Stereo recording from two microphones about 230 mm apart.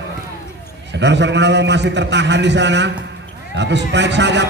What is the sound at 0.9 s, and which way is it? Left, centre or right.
Mantra, right.